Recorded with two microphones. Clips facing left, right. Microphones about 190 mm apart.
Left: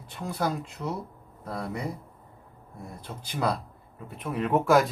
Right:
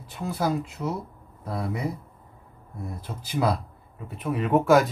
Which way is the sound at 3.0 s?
5° right (ahead or behind).